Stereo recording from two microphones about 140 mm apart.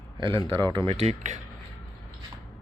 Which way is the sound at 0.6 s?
35° right (ahead or behind).